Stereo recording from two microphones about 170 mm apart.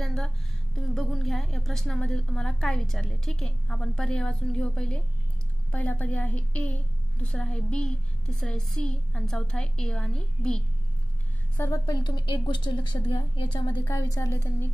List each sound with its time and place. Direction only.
0.0 s a sound: centre (ahead or behind)
0.9 s a woman's voice: centre (ahead or behind)
11.5 s a woman's voice: 15° left (ahead or behind)